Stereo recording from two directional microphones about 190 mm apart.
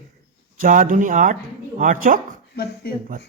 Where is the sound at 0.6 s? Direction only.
45° right (ahead or behind).